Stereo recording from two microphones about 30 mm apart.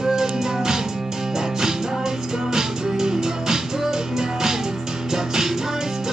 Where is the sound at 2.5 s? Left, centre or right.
Centre.